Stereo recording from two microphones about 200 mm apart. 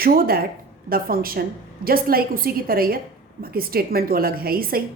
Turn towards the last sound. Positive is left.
turn(degrees=-50)  # may be behind; listen again after turning